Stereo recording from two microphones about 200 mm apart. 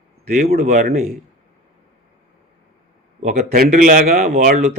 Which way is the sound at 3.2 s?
40° right (ahead or behind).